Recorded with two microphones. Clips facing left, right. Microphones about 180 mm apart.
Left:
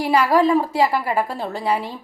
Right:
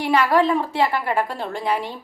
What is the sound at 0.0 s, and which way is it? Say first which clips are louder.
A woman's voice: left 1 dB; 10° left (ahead or behind).